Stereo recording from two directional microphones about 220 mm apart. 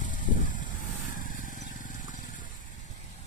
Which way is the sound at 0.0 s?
35° left (ahead or behind).